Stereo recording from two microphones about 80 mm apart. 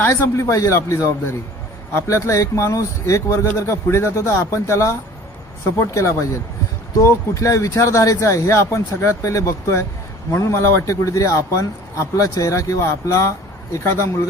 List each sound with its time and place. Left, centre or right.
0.0 s speech: left